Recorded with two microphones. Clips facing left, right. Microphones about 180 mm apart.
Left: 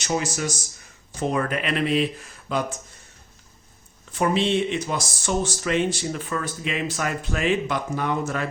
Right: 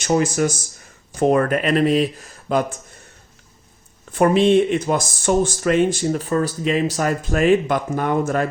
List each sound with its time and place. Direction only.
0.0 s speech: 55° right (ahead or behind)
4.1 s speech: 55° right (ahead or behind)